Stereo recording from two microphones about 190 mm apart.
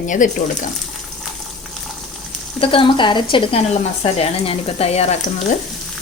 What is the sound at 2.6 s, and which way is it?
Speech, 30° left (ahead or behind).